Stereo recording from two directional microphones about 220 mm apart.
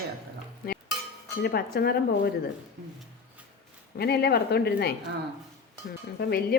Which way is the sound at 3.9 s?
45° left (ahead or behind).